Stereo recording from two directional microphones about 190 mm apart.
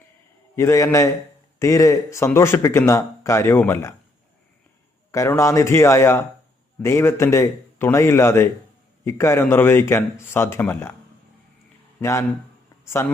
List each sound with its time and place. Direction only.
0.5 s speech: 15° left (ahead or behind)
5.1 s speech: 15° left (ahead or behind)
11.9 s a man's voice: 15° left (ahead or behind)